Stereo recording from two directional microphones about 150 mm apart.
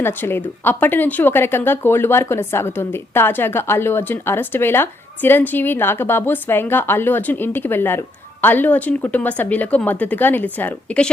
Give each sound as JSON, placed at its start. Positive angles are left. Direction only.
{"t": 0.0, "sound": "speech", "side_deg": 15}